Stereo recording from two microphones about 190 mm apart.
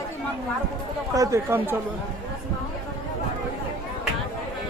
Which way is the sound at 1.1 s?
15° right (ahead or behind).